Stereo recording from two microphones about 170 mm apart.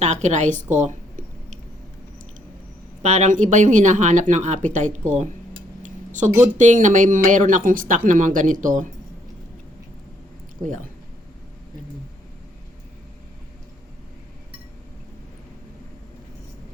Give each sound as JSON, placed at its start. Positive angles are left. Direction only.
{"t": 0.0, "sound": "a woman's voice", "side_deg": -45}
{"t": 0.8, "sound": "a sound", "side_deg": -45}
{"t": 3.0, "sound": "speech", "side_deg": -45}
{"t": 5.8, "sound": "cutlery", "side_deg": -45}
{"t": 6.4, "sound": "speech", "side_deg": -45}